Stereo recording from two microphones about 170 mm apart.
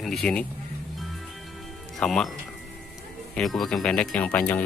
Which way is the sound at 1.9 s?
5° left (ahead or behind).